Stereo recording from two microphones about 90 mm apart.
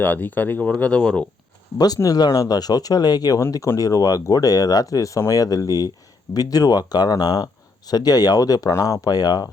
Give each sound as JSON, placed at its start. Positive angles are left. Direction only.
{"t": 0.0, "sound": "speech", "side_deg": 20}
{"t": 2.0, "sound": "speech", "side_deg": 45}